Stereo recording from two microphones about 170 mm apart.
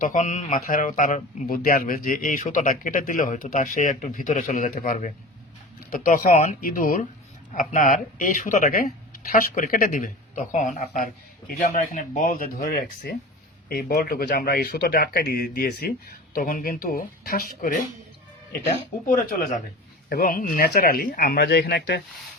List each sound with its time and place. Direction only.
0.0 s speech: 45° left (ahead or behind)
19.0 s speech: 55° left (ahead or behind); by 22.0 s 70° left (ahead or behind)